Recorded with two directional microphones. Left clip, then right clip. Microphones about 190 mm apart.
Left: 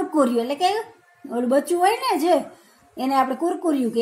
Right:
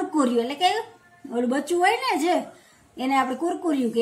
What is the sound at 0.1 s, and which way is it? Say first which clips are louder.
A woman's voice: left 3 dB; 25° left (ahead or behind).